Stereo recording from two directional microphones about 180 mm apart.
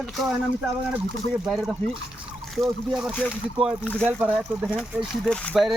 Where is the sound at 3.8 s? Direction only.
5° left (ahead or behind).